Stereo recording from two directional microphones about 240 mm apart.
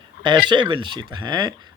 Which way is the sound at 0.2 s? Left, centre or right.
Centre.